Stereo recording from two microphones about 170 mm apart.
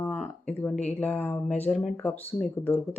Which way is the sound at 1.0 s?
10° left (ahead or behind).